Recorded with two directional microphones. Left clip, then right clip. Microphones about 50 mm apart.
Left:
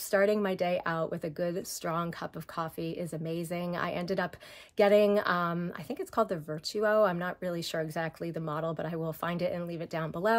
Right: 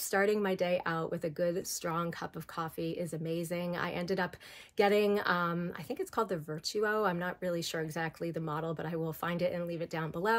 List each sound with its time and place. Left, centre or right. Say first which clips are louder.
0.1 s speech: left 3 dB; left